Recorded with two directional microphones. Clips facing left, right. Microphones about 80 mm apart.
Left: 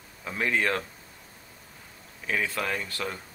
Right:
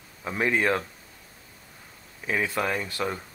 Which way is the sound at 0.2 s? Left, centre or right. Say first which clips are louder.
Right 2 dB; centre.